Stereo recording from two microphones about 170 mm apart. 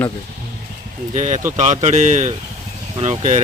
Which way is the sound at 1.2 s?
45° right (ahead or behind).